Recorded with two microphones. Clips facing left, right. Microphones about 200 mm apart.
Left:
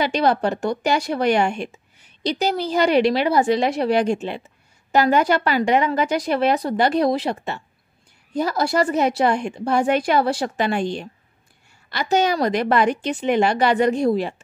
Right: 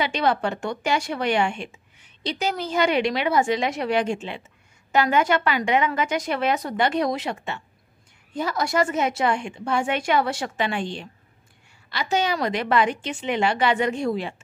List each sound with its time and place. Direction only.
0.0 s speech: 40° left (ahead or behind)